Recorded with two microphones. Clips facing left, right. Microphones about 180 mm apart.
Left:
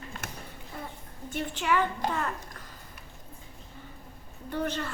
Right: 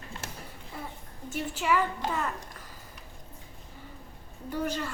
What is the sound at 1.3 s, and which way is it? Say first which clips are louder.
Speech: even; 5° right (ahead or behind).